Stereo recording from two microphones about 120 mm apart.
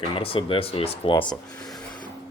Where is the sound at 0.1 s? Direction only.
50° left (ahead or behind).